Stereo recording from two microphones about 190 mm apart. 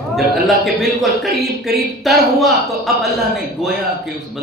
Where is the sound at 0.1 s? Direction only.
Centre (ahead or behind).